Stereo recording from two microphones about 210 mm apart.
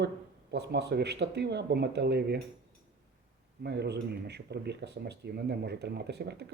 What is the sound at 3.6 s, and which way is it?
Speech, 50° right (ahead or behind).